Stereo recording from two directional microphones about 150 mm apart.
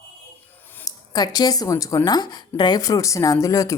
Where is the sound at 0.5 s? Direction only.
15° left (ahead or behind).